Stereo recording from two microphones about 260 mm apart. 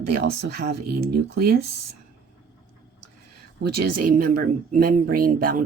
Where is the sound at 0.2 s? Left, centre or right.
Right.